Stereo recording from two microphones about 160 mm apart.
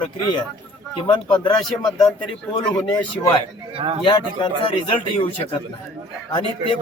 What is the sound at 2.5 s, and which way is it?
Speech, 25° left (ahead or behind).